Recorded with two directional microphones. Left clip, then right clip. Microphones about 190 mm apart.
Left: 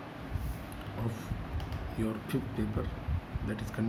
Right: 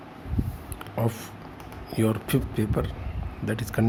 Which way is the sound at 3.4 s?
60° right (ahead or behind).